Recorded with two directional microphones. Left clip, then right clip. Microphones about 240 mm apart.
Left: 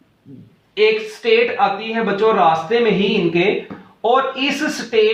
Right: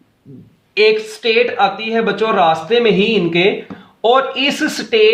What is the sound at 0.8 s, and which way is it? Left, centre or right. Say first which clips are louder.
Speech: right 3 dB; right.